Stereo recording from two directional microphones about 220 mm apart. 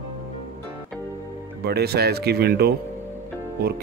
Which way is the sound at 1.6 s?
45° right (ahead or behind).